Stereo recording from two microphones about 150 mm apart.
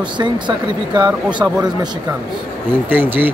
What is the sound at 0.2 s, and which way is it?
Speech, 30° right (ahead or behind).